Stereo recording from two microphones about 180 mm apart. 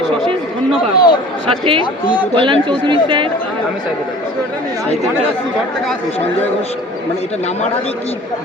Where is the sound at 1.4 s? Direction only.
30° right (ahead or behind).